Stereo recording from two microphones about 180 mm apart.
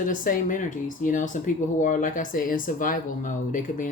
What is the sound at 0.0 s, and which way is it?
Speech, 45° left (ahead or behind).